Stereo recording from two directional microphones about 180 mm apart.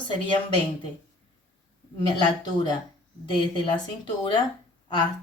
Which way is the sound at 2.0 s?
25° left (ahead or behind).